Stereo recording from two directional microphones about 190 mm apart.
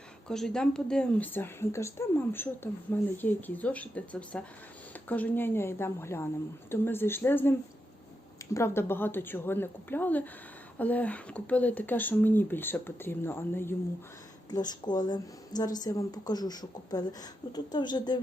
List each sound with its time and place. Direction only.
0.3 s speech: 5° left (ahead or behind)
8.5 s a woman's voice: 15° left (ahead or behind)